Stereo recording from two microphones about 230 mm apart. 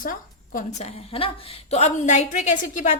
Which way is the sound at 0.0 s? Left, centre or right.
Left.